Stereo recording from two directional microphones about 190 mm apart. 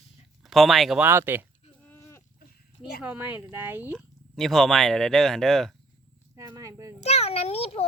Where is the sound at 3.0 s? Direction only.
10° right (ahead or behind).